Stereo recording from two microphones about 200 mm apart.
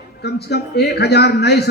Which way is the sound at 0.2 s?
55° left (ahead or behind).